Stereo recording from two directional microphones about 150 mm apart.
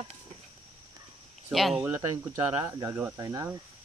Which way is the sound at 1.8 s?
15° right (ahead or behind).